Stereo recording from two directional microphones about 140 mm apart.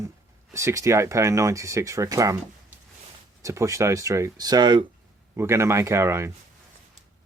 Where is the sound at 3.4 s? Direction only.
25° right (ahead or behind).